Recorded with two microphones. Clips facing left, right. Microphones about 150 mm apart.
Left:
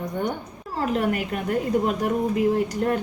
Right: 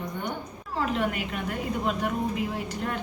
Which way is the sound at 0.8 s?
45° left (ahead or behind).